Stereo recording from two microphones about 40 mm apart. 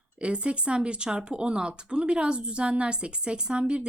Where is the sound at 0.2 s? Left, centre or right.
Right.